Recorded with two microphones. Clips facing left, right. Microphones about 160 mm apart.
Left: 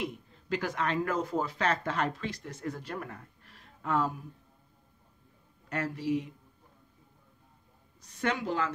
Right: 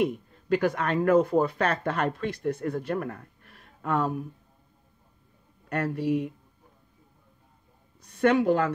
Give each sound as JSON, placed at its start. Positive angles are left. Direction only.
{"t": 0.0, "sound": "speech", "side_deg": -55}
{"t": 5.7, "sound": "speech", "side_deg": -55}
{"t": 8.0, "sound": "speech", "side_deg": -55}